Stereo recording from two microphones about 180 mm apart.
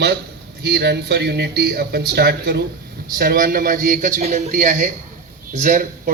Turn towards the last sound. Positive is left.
turn(degrees=-50)  # may be behind; listen again after turning